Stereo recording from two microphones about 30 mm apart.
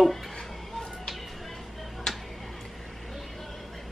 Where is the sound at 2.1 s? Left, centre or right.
Centre.